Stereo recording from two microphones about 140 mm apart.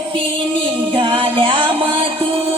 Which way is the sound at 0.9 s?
35° right (ahead or behind).